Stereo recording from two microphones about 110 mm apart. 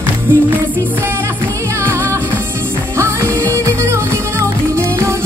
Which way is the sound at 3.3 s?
15° left (ahead or behind).